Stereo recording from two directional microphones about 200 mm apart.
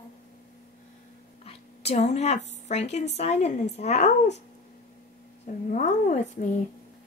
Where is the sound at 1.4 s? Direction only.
30° left (ahead or behind).